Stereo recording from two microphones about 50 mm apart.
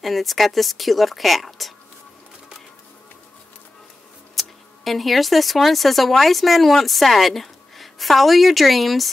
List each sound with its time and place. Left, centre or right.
0.0 s a woman's voice: centre
4.4 s speech: centre